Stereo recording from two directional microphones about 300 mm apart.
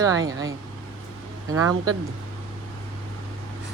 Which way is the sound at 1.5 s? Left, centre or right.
Right.